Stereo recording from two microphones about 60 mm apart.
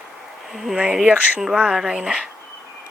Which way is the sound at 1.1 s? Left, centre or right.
Right.